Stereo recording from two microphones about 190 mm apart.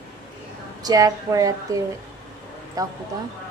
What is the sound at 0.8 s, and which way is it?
Speech, 20° right (ahead or behind).